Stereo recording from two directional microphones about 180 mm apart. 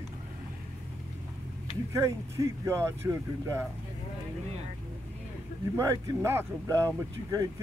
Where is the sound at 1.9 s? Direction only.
15° right (ahead or behind).